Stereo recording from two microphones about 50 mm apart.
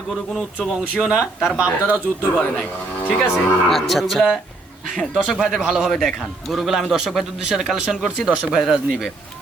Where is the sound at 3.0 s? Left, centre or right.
Left.